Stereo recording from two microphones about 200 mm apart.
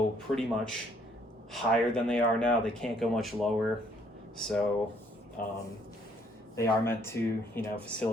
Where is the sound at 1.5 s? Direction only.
5° left (ahead or behind).